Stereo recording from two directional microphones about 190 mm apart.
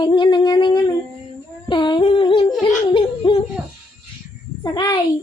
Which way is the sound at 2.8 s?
25° left (ahead or behind).